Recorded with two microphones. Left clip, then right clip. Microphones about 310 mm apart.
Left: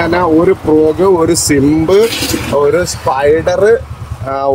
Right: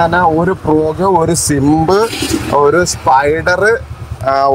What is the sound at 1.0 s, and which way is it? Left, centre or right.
Speech, right.